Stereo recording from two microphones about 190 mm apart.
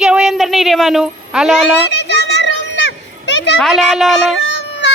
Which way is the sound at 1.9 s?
60° left (ahead or behind).